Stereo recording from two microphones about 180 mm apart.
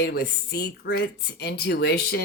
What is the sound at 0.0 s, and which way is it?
Speech, 65° left (ahead or behind).